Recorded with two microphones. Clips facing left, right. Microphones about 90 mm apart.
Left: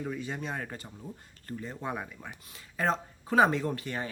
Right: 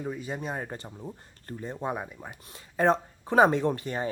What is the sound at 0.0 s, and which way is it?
Speech, 15° right (ahead or behind).